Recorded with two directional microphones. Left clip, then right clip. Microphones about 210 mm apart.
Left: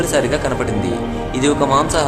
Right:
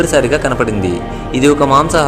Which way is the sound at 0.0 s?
20° right (ahead or behind).